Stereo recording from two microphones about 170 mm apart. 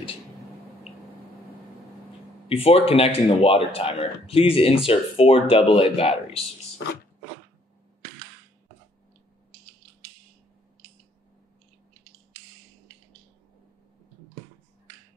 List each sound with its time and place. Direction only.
2.4 s speech: 35° left (ahead or behind)